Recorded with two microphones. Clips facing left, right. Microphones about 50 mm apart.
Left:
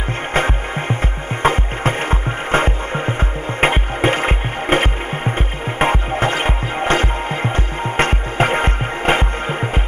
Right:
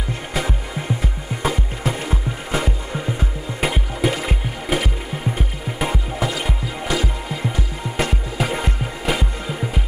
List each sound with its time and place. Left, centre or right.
0.3 s music: left